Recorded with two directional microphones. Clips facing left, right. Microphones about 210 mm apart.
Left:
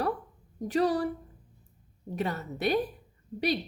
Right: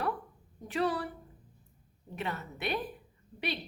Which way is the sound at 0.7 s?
40° left (ahead or behind).